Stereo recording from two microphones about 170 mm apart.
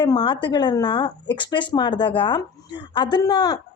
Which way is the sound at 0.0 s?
25° left (ahead or behind).